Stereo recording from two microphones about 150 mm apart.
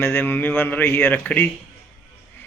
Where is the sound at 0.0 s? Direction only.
15° left (ahead or behind).